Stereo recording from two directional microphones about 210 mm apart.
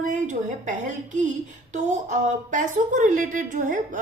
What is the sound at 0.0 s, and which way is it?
A woman's voice, 35° right (ahead or behind).